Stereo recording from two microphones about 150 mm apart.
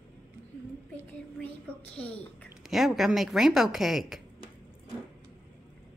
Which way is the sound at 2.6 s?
Centre (ahead or behind).